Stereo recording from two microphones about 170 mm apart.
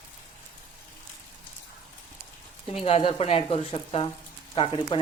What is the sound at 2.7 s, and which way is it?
Speech, 35° left (ahead or behind).